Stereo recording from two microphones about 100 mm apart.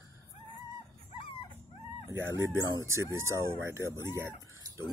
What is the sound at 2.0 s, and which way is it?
Speech, 25° right (ahead or behind).